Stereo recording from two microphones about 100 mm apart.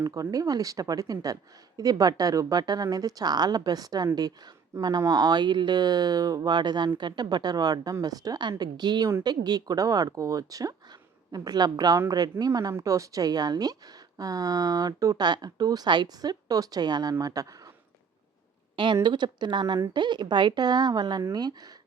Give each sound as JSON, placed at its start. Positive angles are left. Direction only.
{"t": 0.0, "sound": "a woman's voice", "side_deg": -35}
{"t": 19.0, "sound": "speech", "side_deg": -45}